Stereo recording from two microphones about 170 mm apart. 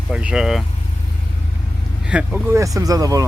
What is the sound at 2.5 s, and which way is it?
Speech, 20° right (ahead or behind).